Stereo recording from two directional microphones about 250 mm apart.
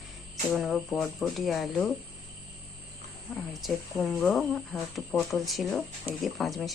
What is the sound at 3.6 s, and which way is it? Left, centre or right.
Speech, centre.